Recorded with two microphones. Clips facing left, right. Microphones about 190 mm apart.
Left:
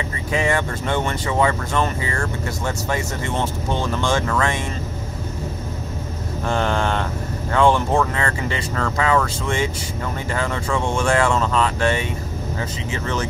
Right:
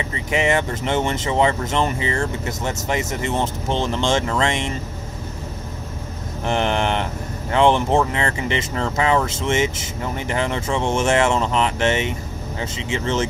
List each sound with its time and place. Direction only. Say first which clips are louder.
0.3 s speech: right 1 dB; 20° right (ahead or behind)
6.4 s speech: right 1 dB; 20° right (ahead or behind)